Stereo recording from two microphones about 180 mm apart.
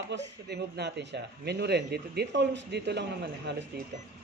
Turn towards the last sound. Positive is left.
turn(degrees=-70)  # may be behind; listen again after turning